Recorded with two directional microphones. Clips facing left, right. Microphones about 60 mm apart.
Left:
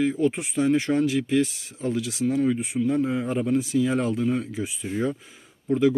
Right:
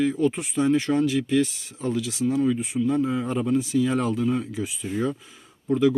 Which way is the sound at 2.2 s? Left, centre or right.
Left.